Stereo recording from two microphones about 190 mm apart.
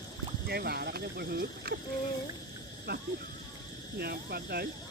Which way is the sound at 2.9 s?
55° right (ahead or behind).